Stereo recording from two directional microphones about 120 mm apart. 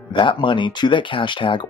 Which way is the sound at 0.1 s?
45° left (ahead or behind).